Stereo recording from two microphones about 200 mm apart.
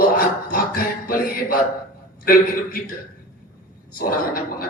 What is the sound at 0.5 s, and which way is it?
Music, 45° left (ahead or behind).